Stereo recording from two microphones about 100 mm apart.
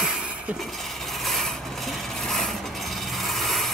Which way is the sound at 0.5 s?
Centre (ahead or behind).